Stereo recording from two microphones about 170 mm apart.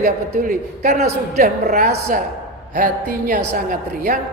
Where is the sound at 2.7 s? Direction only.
50° right (ahead or behind).